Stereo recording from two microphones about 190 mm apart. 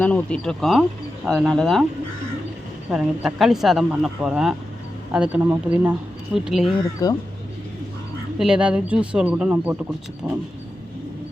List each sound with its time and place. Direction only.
0.0 s speech: 5° left (ahead or behind)
2.9 s speech: 5° right (ahead or behind)
7.0 s speech: 20° left (ahead or behind)
8.4 s speech: 5° right (ahead or behind)